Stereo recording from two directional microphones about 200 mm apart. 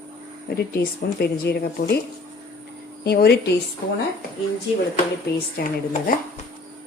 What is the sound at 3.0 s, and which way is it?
Speech, 50° left (ahead or behind).